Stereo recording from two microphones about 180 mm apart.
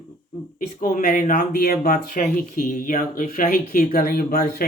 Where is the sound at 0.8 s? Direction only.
50° left (ahead or behind).